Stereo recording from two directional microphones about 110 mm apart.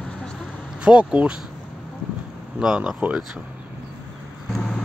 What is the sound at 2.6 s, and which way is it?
Speech, 5° right (ahead or behind).